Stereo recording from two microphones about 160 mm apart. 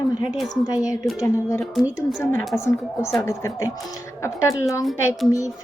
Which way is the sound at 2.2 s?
15° left (ahead or behind).